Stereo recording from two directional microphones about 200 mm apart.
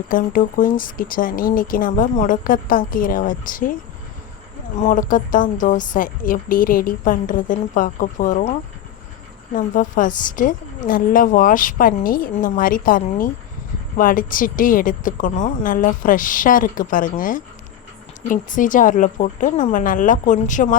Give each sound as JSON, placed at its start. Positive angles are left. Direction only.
{"t": 0.1, "sound": "a woman's voice", "side_deg": 45}
{"t": 4.8, "sound": "a woman's voice", "side_deg": 40}
{"t": 9.6, "sound": "a woman's voice", "side_deg": 40}